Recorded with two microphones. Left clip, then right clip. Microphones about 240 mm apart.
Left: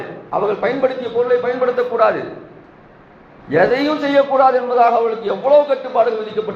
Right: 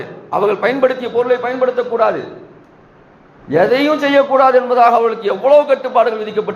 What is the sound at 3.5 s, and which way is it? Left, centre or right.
A man's voice, right.